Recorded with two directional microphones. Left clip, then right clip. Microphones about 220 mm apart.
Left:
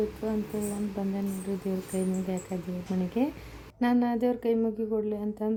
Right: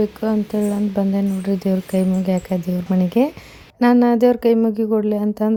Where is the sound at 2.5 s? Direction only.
45° right (ahead or behind).